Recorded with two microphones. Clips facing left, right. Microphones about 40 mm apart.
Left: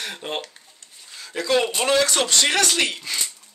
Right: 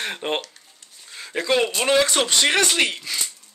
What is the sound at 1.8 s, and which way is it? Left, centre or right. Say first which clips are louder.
Speech: right 1 dB; centre.